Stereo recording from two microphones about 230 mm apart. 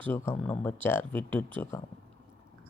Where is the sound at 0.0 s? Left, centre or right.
Centre.